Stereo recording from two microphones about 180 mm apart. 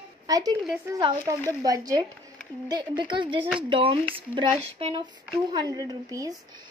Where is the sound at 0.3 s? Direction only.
20° right (ahead or behind).